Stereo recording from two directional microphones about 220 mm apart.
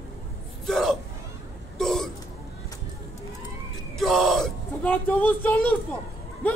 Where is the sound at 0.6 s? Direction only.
Centre (ahead or behind).